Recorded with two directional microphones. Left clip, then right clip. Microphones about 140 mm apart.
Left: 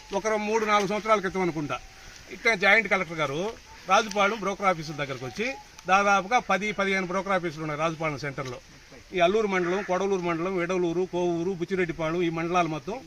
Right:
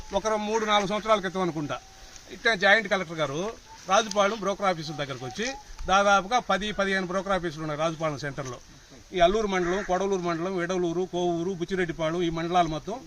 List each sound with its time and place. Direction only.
0.2 s speech: 5° right (ahead or behind)
3.2 s speech: 5° left (ahead or behind); by 13.0 s 10° right (ahead or behind)